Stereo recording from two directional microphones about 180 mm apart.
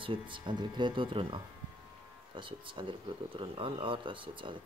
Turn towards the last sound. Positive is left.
turn(degrees=-25)  # may be behind; listen again after turning